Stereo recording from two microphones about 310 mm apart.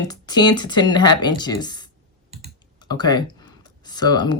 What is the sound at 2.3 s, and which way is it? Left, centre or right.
Typing, right.